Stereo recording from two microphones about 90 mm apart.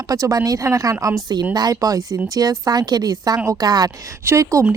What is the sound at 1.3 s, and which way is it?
Speech, 50° right (ahead or behind).